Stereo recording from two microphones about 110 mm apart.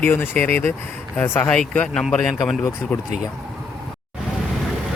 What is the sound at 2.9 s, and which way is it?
Speech, 15° left (ahead or behind).